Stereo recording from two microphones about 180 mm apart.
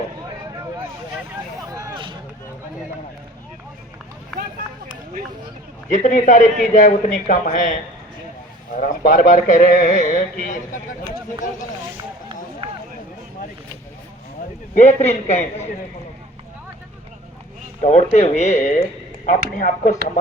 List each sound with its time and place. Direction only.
1.7 s a sound: 15° right (ahead or behind)
5.9 s speech: 45° left (ahead or behind)
8.8 s speech: 45° left (ahead or behind)
14.8 s speech: 40° left (ahead or behind)
17.8 s speech: 40° left (ahead or behind)